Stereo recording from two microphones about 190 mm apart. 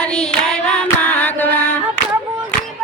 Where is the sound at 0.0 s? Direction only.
5° left (ahead or behind).